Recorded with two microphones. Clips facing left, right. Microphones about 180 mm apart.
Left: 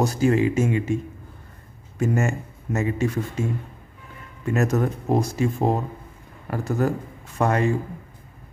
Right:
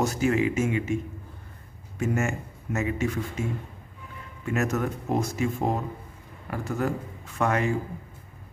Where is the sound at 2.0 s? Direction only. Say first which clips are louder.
Left 4 dB; 35° left (ahead or behind).